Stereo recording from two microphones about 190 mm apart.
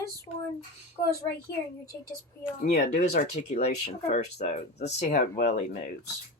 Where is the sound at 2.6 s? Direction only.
45° left (ahead or behind).